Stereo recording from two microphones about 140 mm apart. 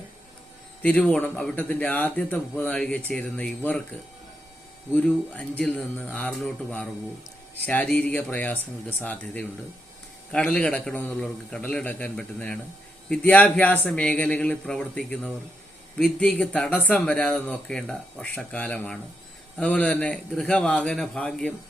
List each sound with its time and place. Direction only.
0.8 s speech: 10° left (ahead or behind)
4.9 s speech: 10° left (ahead or behind)